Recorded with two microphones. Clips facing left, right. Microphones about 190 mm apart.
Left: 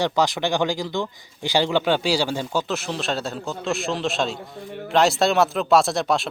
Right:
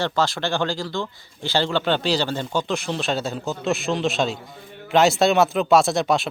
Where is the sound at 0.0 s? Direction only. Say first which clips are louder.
Left 2 dB; 15° left (ahead or behind).